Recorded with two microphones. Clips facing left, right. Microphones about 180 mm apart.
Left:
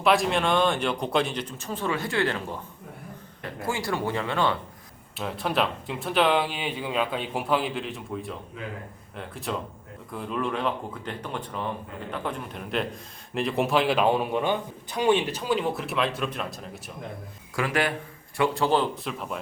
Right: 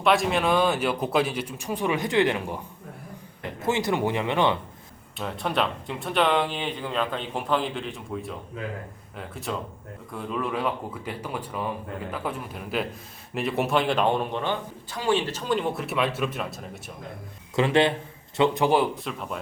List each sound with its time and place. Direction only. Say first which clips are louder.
0.0 s speech: even; centre (ahead or behind); by 4.5 s 20° right (ahead or behind)
5.1 s a man's voice: even; centre (ahead or behind)
17.5 s a man's voice: right 5 dB; 25° right (ahead or behind)
19.0 s a man's voice: even; centre (ahead or behind)